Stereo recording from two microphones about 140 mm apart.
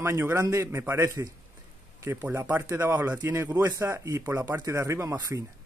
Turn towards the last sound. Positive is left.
turn(degrees=-20)  # may be behind; listen again after turning